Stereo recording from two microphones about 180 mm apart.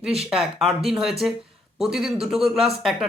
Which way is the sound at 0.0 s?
5° right (ahead or behind).